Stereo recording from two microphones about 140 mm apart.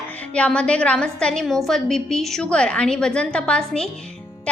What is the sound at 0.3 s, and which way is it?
A woman's voice, 5° left (ahead or behind).